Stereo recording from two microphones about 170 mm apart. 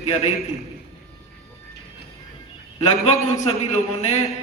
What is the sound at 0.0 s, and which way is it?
Speech, 40° left (ahead or behind).